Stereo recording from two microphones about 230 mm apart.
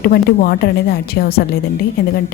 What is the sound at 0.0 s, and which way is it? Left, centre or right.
A woman's voice, left.